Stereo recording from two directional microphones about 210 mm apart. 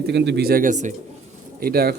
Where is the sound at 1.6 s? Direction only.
45° right (ahead or behind).